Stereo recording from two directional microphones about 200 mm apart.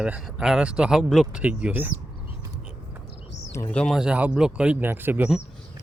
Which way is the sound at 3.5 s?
10° left (ahead or behind).